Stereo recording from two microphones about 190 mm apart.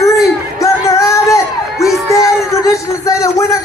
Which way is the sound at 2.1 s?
15° left (ahead or behind).